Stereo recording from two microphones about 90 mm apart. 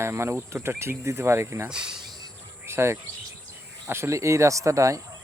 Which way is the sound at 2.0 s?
50° right (ahead or behind).